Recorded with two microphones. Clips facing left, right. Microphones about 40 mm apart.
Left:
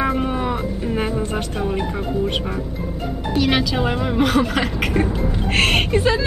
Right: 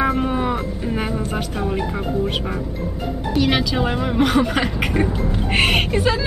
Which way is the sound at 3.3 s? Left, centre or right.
Centre.